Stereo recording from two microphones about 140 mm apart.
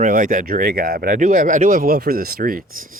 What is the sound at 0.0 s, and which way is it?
Speech, 75° right (ahead or behind).